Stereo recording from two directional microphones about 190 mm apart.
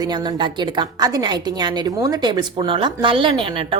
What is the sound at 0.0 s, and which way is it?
A woman's voice, 20° right (ahead or behind).